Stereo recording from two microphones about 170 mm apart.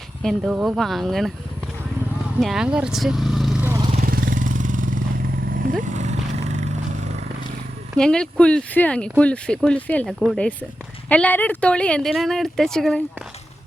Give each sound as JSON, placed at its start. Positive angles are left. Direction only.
{"t": 0.2, "sound": "speech", "side_deg": 0}
{"t": 2.4, "sound": "speech", "side_deg": -5}
{"t": 4.0, "sound": "vehicle", "side_deg": -60}
{"t": 7.9, "sound": "speech", "side_deg": 5}